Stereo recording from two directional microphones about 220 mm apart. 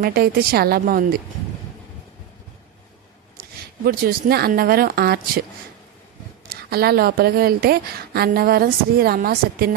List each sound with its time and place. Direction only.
0.0 s a woman's voice: 45° right (ahead or behind)
3.3 s a woman's voice: 40° right (ahead or behind)
6.5 s a woman's voice: 45° right (ahead or behind)